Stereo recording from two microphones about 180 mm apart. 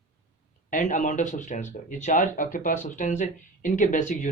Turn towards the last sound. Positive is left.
turn(degrees=45)  # may be behind; listen again after turning